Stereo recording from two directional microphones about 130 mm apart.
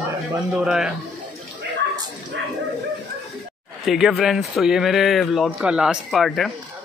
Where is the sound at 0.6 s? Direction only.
5° right (ahead or behind).